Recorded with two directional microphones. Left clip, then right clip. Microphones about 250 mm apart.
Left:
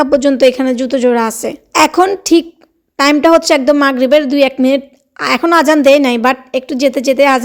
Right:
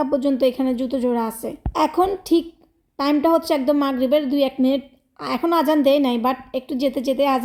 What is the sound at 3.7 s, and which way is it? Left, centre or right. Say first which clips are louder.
Speech: left 9 dB; left.